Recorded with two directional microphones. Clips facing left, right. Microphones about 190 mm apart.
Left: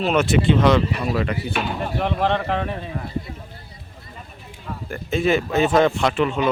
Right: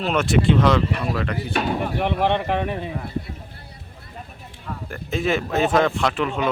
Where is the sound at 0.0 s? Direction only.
Centre (ahead or behind).